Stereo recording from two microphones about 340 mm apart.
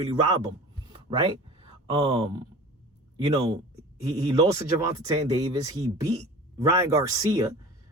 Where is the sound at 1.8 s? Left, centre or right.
Centre.